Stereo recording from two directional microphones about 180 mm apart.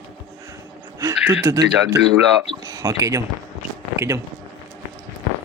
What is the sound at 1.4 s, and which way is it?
Speech, 15° right (ahead or behind).